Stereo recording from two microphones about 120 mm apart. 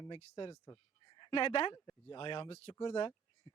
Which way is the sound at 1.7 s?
40° left (ahead or behind).